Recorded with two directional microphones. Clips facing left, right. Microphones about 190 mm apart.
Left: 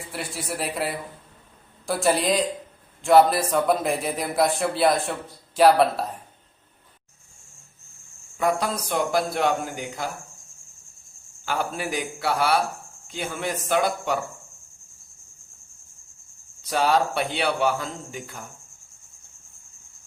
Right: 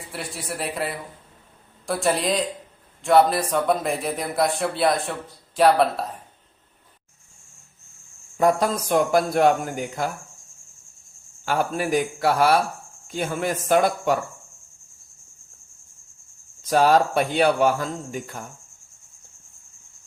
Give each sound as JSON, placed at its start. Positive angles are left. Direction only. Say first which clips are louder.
{"t": 0.1, "sound": "a man's voice", "louder": "even", "side_deg": 0}
{"t": 8.4, "sound": "speech", "louder": "right 4 dB", "side_deg": -40}
{"t": 11.4, "sound": "speech", "louder": "right 4 dB", "side_deg": -45}
{"t": 16.6, "sound": "speech", "louder": "right 4 dB", "side_deg": -45}